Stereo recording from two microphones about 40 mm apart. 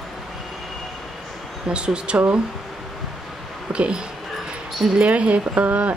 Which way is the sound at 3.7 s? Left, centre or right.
Right.